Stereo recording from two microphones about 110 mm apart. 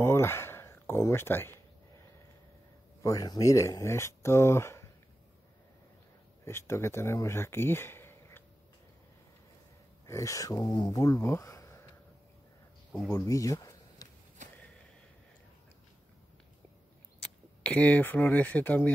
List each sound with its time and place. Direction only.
0.0 s a sound: 25° left (ahead or behind)
3.0 s speech: 30° left (ahead or behind)
6.4 s speech: 25° left (ahead or behind)
10.0 s speech: 25° left (ahead or behind)
13.1 s a sound: 30° left (ahead or behind)
17.2 s speech: 10° left (ahead or behind)